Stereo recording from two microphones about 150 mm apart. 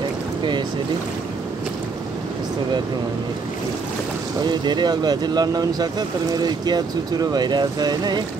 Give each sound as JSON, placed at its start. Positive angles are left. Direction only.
{"t": 4.4, "sound": "speech", "side_deg": -30}